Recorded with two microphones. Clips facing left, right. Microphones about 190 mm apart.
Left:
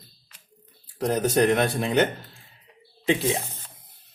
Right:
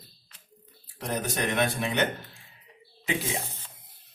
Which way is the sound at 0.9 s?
35° left (ahead or behind).